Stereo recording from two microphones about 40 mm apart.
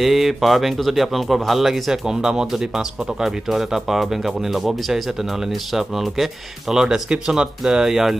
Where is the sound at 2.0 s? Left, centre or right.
Centre.